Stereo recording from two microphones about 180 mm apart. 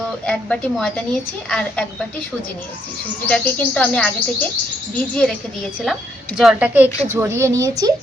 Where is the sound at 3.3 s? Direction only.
5° left (ahead or behind).